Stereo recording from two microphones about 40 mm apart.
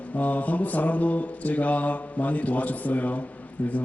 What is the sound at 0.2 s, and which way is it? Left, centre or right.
A man's voice, left.